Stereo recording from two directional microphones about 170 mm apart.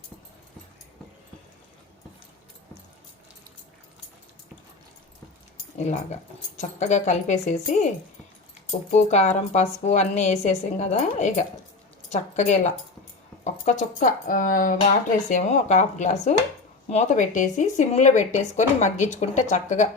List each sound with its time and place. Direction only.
5.7 s speech: 40° left (ahead or behind)
9.0 s speech: 45° left (ahead or behind)